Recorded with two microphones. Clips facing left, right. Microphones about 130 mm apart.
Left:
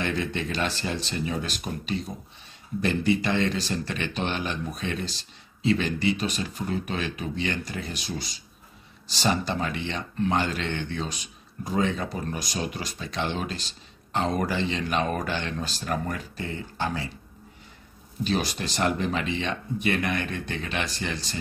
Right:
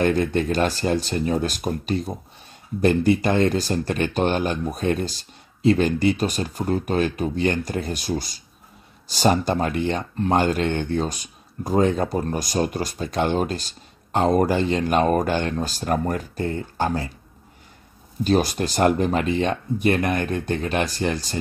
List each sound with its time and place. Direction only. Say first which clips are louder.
0.0 s speech: right 8 dB; 45° right (ahead or behind)
18.2 s speech: right 7 dB; 45° right (ahead or behind)